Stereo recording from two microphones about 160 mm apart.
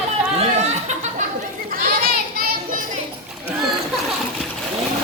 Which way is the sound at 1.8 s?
65° right (ahead or behind).